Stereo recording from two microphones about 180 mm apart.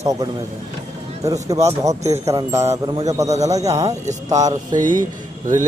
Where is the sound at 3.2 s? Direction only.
40° right (ahead or behind).